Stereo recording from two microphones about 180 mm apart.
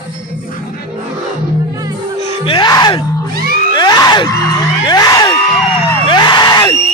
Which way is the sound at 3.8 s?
25° left (ahead or behind).